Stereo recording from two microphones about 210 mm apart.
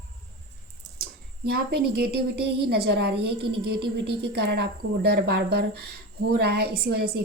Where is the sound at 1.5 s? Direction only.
50° right (ahead or behind).